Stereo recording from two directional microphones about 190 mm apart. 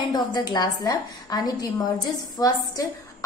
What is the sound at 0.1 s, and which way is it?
A woman's voice, 20° left (ahead or behind).